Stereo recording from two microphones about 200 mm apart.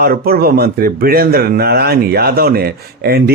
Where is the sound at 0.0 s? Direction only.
50° right (ahead or behind).